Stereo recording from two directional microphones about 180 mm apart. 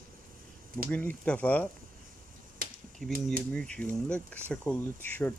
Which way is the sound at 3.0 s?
Centre (ahead or behind).